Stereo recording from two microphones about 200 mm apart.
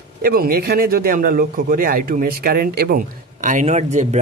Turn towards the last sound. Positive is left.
turn(degrees=-35)  # may be behind; listen again after turning